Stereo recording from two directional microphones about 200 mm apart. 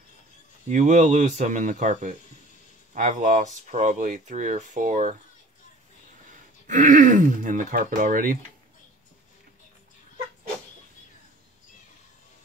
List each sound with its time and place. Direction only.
0.7 s speech: 35° right (ahead or behind)
6.7 s speech: 40° right (ahead or behind)